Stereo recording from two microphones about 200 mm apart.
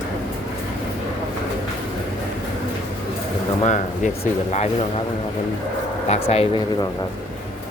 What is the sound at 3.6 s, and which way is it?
Speech, 35° left (ahead or behind).